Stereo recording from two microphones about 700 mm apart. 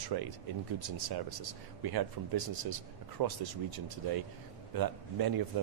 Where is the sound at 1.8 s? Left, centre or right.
Right.